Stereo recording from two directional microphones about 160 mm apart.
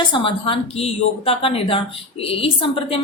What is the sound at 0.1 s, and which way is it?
A woman's voice, 30° left (ahead or behind).